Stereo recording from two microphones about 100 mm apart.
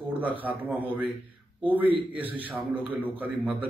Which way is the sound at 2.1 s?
15° right (ahead or behind).